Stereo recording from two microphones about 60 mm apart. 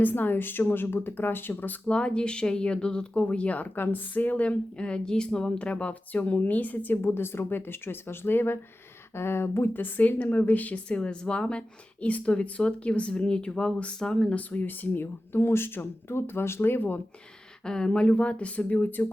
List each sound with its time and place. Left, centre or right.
0.0 s speech: left
1.9 s speech: centre; by 17.0 s left
17.7 s speech: centre; by 19.1 s left